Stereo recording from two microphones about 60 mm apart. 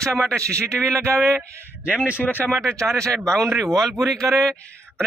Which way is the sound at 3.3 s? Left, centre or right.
Centre.